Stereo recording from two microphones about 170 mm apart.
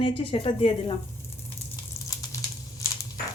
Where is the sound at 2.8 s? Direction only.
15° left (ahead or behind).